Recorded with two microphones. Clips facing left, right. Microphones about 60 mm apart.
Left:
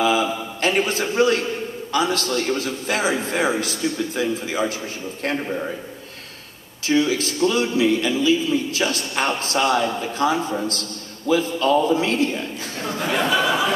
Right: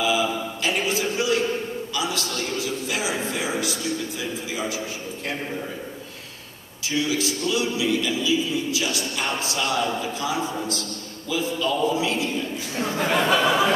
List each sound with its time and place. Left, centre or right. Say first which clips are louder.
0.0 s a sound: left 3 dB; left
2.0 s a man's voice: left 8 dB; left
6.9 s a man's voice: left 5 dB; left
12.7 s speech: right 1 dB; right